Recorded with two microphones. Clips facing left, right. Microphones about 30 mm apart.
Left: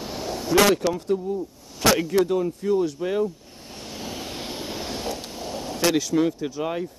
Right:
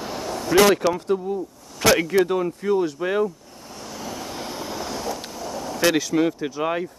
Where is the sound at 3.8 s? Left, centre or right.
Left.